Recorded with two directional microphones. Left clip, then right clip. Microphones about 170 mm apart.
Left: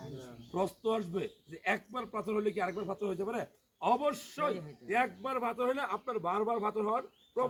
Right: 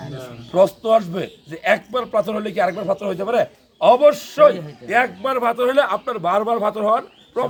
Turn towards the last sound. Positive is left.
turn(degrees=-30)  # may be behind; listen again after turning